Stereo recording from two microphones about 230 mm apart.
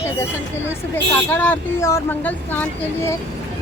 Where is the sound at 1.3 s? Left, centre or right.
Centre.